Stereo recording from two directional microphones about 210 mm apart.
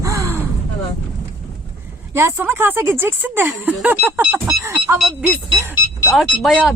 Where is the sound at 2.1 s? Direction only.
10° right (ahead or behind).